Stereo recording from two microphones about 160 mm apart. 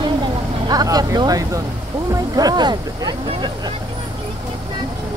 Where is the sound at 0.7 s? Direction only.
25° right (ahead or behind).